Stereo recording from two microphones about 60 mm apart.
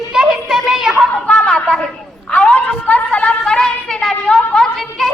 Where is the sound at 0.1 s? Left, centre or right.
Centre.